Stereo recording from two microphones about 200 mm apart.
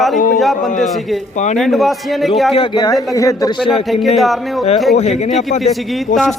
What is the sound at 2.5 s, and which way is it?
Speech, 25° left (ahead or behind).